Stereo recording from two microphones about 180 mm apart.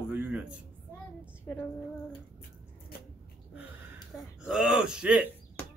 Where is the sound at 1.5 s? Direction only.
10° left (ahead or behind).